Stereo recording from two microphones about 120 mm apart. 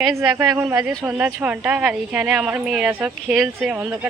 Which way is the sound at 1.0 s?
15° right (ahead or behind).